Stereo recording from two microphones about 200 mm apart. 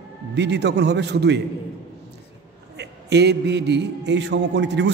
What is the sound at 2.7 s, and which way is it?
A man's voice, 55° right (ahead or behind).